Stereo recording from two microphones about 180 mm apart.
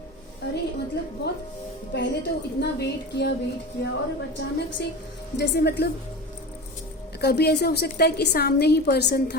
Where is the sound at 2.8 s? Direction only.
70° left (ahead or behind).